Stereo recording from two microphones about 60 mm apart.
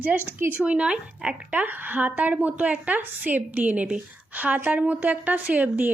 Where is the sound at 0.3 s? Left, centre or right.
Right.